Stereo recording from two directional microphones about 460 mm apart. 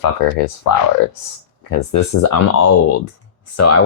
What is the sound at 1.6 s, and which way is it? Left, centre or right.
Speech, left.